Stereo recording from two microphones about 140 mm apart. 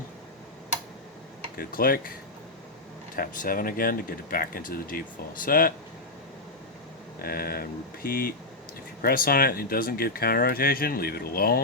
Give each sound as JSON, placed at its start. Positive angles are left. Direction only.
{"t": 1.5, "sound": "speech", "side_deg": 90}
{"t": 3.2, "sound": "speech", "side_deg": 90}
{"t": 7.2, "sound": "speech", "side_deg": 90}